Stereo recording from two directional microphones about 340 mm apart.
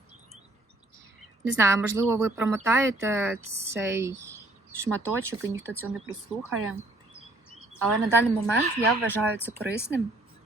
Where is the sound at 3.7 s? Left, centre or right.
Centre.